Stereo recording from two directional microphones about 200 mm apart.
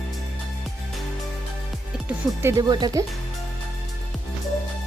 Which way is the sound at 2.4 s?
20° right (ahead or behind).